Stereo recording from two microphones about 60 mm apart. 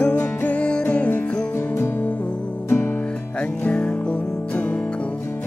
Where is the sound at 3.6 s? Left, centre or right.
Centre.